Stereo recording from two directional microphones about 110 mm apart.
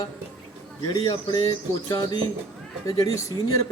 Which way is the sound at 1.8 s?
40° left (ahead or behind).